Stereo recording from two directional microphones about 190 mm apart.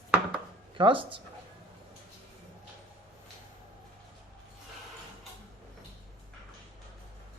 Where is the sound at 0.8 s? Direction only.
25° right (ahead or behind).